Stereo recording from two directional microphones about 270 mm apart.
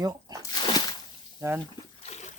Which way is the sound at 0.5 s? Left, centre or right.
Centre.